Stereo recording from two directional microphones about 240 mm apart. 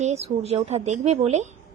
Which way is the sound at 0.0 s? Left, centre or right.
Right.